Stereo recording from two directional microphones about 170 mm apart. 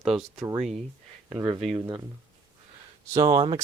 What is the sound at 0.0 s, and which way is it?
Speech, centre (ahead or behind).